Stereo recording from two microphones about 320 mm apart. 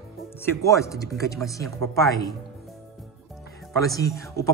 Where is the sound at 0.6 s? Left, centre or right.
Centre.